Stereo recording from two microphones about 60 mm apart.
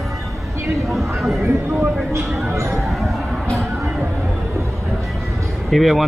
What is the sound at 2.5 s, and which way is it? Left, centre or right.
Speech, right.